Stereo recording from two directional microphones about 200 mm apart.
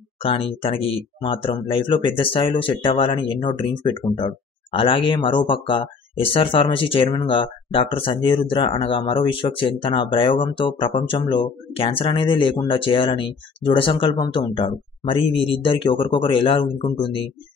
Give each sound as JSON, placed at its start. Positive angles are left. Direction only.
{"t": 0.2, "sound": "speech", "side_deg": 25}